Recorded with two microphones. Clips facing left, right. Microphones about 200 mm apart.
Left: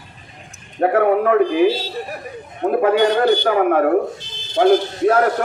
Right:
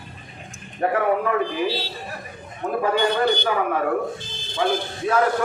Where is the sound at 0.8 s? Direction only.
50° left (ahead or behind).